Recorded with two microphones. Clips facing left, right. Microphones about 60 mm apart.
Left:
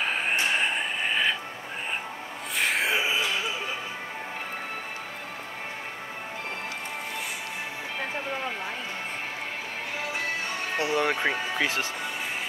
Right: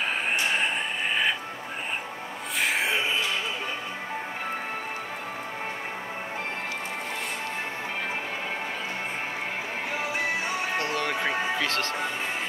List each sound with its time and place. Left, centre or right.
0.0 s a sound: centre
2.6 s music: centre
10.8 s speech: centre